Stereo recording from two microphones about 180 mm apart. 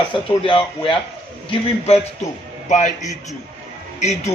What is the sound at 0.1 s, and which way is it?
Speech, 30° left (ahead or behind).